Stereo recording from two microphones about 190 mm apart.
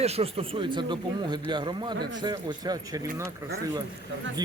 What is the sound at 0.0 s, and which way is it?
Speech, 30° right (ahead or behind).